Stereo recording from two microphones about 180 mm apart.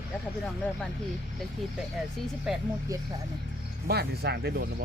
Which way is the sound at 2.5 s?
Centre (ahead or behind).